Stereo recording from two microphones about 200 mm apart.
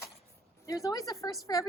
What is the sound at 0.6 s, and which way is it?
A woman's voice, 15° left (ahead or behind).